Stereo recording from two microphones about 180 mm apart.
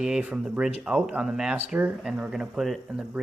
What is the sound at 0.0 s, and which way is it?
Speech, 5° right (ahead or behind).